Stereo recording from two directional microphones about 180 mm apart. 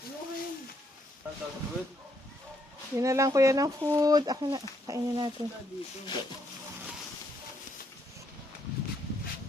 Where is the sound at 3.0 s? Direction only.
15° right (ahead or behind).